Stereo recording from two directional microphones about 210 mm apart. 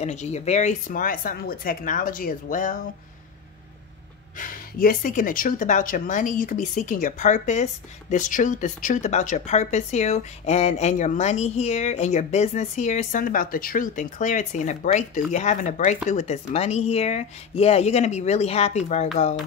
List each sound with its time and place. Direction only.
0.0 s speech: 35° left (ahead or behind)
4.4 s speech: 40° left (ahead or behind)